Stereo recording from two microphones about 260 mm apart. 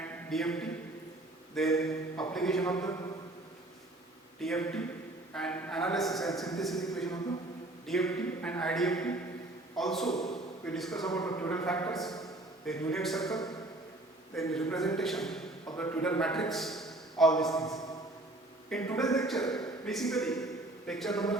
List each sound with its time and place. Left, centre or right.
0.0 s a sound: centre
1.5 s a man's voice: centre
4.4 s a man's voice: centre
18.7 s a man's voice: centre